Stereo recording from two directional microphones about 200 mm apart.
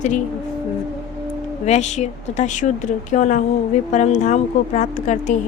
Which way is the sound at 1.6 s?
35° left (ahead or behind).